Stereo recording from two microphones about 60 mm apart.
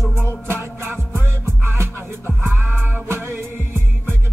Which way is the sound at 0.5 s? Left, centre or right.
Right.